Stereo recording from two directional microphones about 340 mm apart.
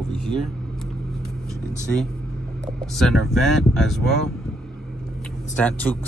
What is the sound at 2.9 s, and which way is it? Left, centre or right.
Speech, centre.